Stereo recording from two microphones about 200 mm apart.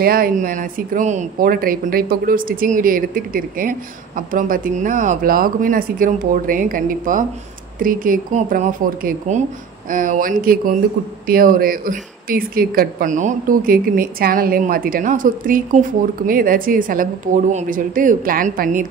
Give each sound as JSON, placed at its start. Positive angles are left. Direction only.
{"t": 0.0, "sound": "speech", "side_deg": -45}